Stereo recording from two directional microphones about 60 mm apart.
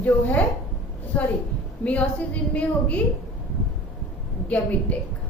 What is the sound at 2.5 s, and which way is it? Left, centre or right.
Speech, left.